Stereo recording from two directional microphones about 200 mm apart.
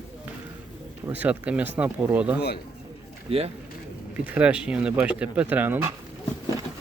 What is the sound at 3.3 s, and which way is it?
Speech, 30° right (ahead or behind).